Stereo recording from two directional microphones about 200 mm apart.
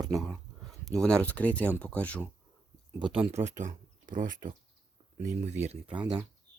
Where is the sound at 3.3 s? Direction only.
35° right (ahead or behind).